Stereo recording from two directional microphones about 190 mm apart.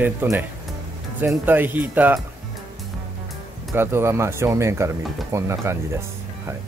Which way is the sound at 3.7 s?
15° right (ahead or behind).